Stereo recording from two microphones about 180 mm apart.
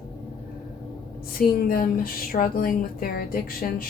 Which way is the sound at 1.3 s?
55° left (ahead or behind).